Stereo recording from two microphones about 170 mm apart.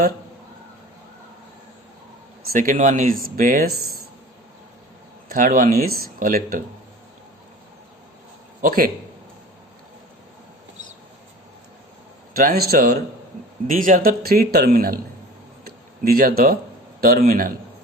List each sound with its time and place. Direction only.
2.5 s speech: 50° right (ahead or behind)
5.3 s speech: 55° right (ahead or behind)
8.6 s speech: 55° right (ahead or behind)
12.4 s speech: 60° right (ahead or behind)
15.6 s a sound: 60° right (ahead or behind)
17.0 s speech: 60° right (ahead or behind)